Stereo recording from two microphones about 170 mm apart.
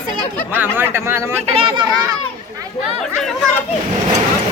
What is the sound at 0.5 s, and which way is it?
Speech, 10° right (ahead or behind).